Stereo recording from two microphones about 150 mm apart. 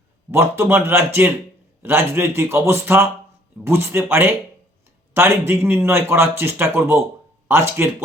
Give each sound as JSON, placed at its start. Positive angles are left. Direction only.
{"t": 0.3, "sound": "speech", "side_deg": -15}